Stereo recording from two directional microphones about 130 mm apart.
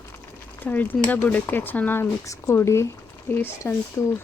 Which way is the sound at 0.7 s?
10° left (ahead or behind).